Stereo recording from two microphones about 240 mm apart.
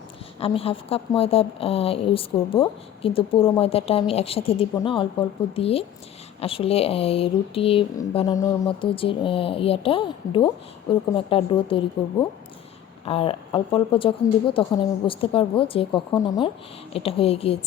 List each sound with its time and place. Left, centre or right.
0.3 s speech: left
13.1 s speech: left